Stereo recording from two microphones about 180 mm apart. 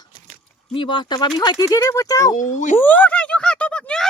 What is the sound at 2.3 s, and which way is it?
Speech, 45° left (ahead or behind).